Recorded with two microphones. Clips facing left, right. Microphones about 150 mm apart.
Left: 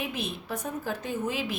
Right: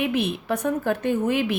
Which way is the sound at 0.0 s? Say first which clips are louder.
Right 9 dB; 65° right (ahead or behind).